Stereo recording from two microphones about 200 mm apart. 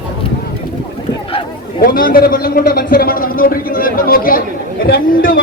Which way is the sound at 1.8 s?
45° left (ahead or behind).